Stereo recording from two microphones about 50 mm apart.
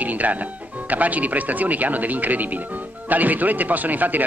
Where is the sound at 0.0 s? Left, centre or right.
Right.